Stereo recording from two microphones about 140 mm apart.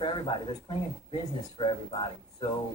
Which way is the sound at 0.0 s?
35° left (ahead or behind).